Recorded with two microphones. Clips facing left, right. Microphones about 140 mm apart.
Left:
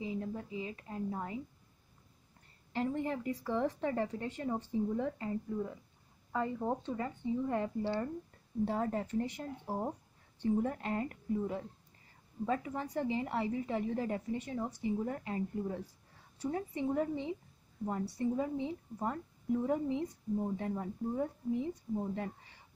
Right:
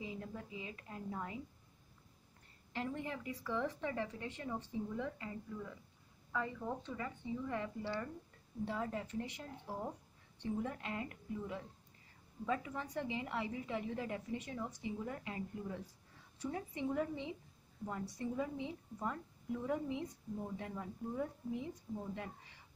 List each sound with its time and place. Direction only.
0.0 s a woman's voice: 30° left (ahead or behind)
2.7 s speech: 35° left (ahead or behind)
7.8 s speech: 30° left (ahead or behind)
8.6 s speech: 45° left (ahead or behind)